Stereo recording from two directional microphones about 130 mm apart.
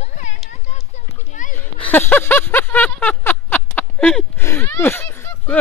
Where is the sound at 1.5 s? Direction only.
15° left (ahead or behind).